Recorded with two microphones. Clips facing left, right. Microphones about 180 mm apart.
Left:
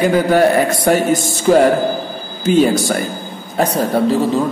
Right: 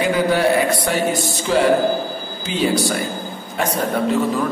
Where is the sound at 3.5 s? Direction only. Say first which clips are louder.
Left 5 dB; 35° left (ahead or behind).